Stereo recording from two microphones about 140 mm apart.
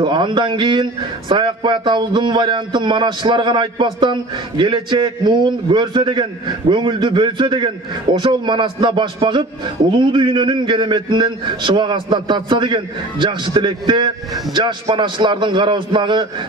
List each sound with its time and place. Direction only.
0.0 s a man's voice: 35° right (ahead or behind)